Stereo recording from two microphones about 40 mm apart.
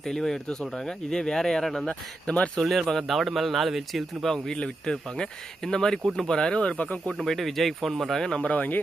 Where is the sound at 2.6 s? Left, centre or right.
Centre.